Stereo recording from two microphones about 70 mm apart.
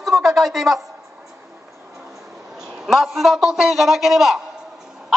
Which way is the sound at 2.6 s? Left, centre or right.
Centre.